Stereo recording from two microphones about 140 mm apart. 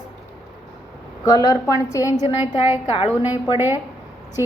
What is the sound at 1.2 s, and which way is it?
Speech, 25° left (ahead or behind).